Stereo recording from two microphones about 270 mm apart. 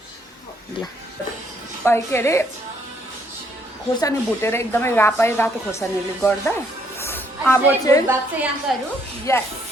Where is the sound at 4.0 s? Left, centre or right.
Centre.